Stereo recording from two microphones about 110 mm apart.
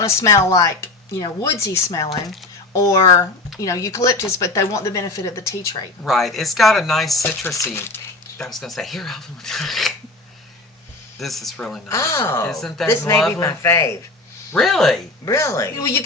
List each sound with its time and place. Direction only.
0.0 s speech: 25° left (ahead or behind)
6.0 s speech: centre (ahead or behind)
7.5 s speech: 25° left (ahead or behind)
8.4 s speech: centre (ahead or behind)
11.2 s speech: centre (ahead or behind)
11.9 s speech: 25° left (ahead or behind)
12.5 s speech: 5° left (ahead or behind)
12.8 s speech: 20° left (ahead or behind)
14.5 s speech: 5° left (ahead or behind)
15.2 s speech: 25° left (ahead or behind)